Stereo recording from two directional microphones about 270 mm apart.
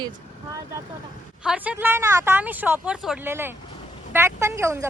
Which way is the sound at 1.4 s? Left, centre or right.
Centre.